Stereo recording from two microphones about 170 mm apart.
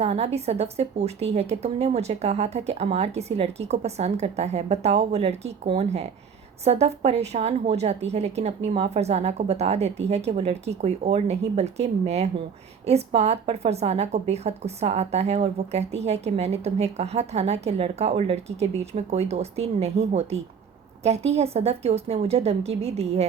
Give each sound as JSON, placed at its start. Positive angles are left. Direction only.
{"t": 0.0, "sound": "a woman's voice", "side_deg": -40}